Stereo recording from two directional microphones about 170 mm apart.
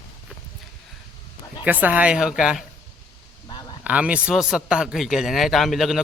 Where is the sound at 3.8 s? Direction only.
10° right (ahead or behind).